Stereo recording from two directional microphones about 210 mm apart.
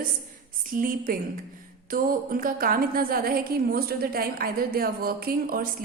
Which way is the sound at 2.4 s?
45° right (ahead or behind).